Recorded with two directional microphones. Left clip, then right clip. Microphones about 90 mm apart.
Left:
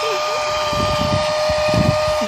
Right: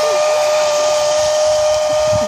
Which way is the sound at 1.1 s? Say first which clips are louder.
Right 4 dB; 90° right.